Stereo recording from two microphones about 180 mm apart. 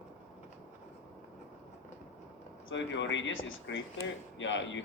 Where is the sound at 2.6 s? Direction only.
90° left.